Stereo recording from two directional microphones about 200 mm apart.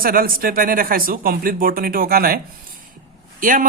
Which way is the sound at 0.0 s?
45° right (ahead or behind).